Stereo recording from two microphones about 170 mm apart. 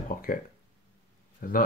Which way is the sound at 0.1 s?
60° left (ahead or behind).